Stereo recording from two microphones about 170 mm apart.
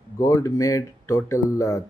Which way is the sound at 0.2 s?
20° left (ahead or behind).